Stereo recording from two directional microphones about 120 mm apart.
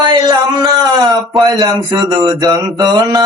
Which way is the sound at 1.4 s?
35° right (ahead or behind).